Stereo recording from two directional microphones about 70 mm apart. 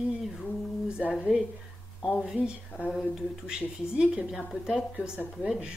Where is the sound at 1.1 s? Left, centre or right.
Centre.